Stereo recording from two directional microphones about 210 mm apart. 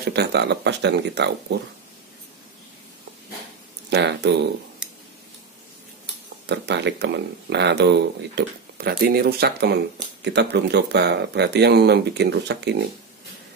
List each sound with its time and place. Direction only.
0.0 s speech: 50° right (ahead or behind)
3.9 s speech: 55° right (ahead or behind)
6.4 s speech: 55° right (ahead or behind)